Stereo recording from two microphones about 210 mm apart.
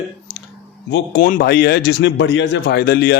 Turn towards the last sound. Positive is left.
turn(degrees=50)  # may be behind; listen again after turning